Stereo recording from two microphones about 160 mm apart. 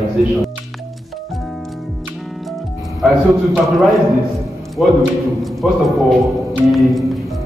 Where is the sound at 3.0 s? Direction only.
Centre (ahead or behind).